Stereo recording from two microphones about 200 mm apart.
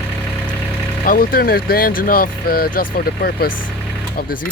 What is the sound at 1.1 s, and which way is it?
Speech, 45° left (ahead or behind).